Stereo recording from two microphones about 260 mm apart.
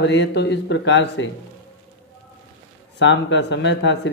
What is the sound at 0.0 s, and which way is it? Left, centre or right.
Speech, left.